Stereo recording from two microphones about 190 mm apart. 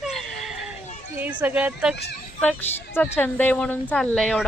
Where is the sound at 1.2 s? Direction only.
10° right (ahead or behind).